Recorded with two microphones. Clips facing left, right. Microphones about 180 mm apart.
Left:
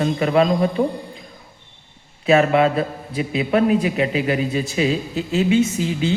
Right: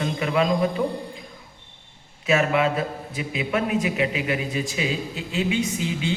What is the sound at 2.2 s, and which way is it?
Speech, 35° left (ahead or behind).